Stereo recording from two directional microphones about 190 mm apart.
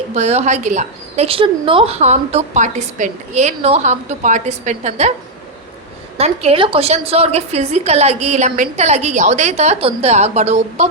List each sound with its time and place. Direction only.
0.1 s a woman's voice: 35° right (ahead or behind)
6.1 s a woman's voice: 35° right (ahead or behind)